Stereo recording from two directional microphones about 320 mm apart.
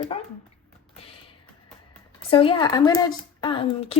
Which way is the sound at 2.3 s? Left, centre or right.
Centre.